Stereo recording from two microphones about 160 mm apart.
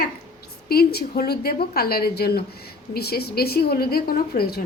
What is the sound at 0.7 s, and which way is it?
Speech, 75° left (ahead or behind).